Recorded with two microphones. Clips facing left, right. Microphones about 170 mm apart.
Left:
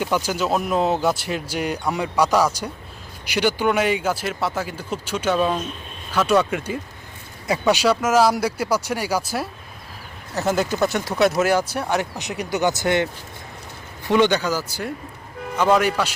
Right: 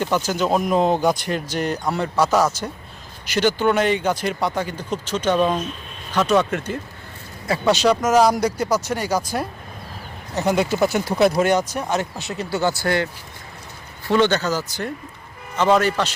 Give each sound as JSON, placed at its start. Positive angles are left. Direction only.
{"t": 0.0, "sound": "speech", "side_deg": 10}
{"t": 11.9, "sound": "speech", "side_deg": 15}
{"t": 14.1, "sound": "speech", "side_deg": 15}